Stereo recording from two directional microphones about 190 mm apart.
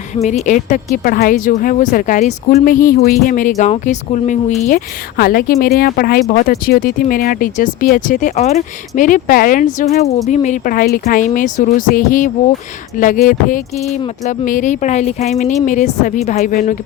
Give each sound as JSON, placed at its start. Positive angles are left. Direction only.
{"t": 0.2, "sound": "speech", "side_deg": 40}
{"t": 5.1, "sound": "speech", "side_deg": 55}